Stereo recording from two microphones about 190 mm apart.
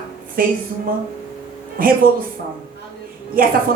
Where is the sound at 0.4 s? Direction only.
50° right (ahead or behind).